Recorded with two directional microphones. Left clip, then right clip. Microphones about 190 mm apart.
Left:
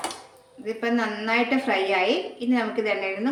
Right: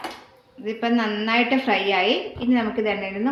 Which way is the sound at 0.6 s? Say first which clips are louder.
Right 2 dB; 40° right (ahead or behind).